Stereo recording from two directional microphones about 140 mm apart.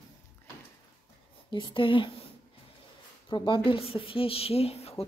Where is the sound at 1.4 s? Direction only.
35° left (ahead or behind).